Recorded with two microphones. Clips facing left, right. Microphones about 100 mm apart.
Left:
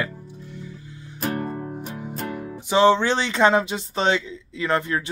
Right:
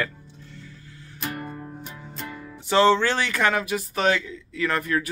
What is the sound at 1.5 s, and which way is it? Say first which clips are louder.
Music: left 6 dB; 45° left (ahead or behind).